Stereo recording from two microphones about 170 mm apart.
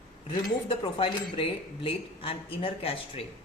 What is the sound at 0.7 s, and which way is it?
Speech, 30° left (ahead or behind).